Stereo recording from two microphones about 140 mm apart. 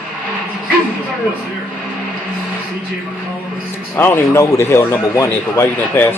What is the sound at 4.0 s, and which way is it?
A man's voice, 15° left (ahead or behind).